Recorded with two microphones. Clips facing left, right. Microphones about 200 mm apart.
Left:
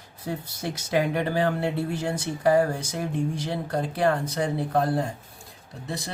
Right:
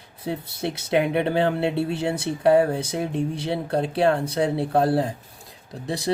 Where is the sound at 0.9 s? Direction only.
25° right (ahead or behind).